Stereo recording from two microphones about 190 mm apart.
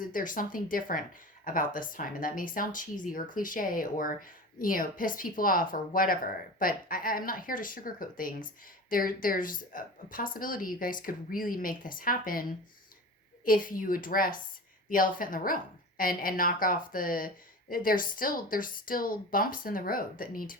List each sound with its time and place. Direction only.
0.0 s a woman's voice: 45° left (ahead or behind)